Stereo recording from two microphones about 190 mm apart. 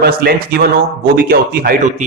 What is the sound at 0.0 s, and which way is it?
A man's voice, 55° right (ahead or behind).